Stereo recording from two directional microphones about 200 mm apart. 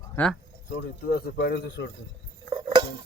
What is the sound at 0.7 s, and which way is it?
Speech, 55° left (ahead or behind).